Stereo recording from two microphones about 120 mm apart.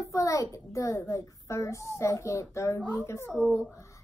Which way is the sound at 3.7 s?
25° left (ahead or behind).